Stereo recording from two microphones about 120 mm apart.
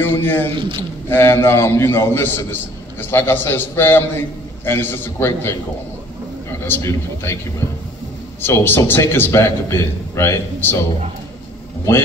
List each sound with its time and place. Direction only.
0.0 s a man's voice: 20° left (ahead or behind)
0.6 s a man's voice: 45° right (ahead or behind)
1.0 s a man's voice: 20° left (ahead or behind)
6.7 s a man's voice: 20° left (ahead or behind)
8.4 s a man's voice: 20° left (ahead or behind)